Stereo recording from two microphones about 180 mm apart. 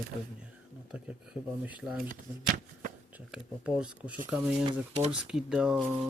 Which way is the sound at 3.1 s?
5° right (ahead or behind).